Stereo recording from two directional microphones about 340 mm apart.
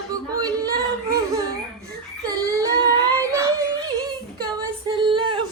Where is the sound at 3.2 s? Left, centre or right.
Centre.